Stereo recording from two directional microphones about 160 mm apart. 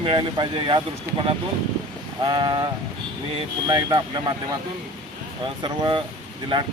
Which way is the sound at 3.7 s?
25° right (ahead or behind).